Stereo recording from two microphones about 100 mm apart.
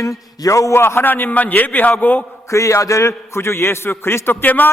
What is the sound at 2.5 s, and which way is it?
A man's voice, 30° left (ahead or behind).